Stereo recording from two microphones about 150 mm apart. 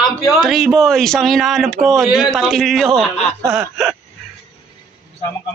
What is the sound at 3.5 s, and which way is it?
Speech, 5° right (ahead or behind).